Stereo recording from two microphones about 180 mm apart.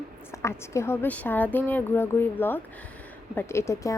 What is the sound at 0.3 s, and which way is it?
A woman's voice, 15° left (ahead or behind).